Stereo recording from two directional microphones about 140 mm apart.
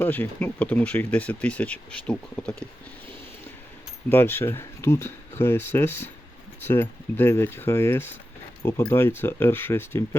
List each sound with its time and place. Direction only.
0.0 s speech: 15° left (ahead or behind)
4.1 s speech: 15° left (ahead or behind)